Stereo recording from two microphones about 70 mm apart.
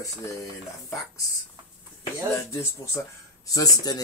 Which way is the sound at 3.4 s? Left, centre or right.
Left.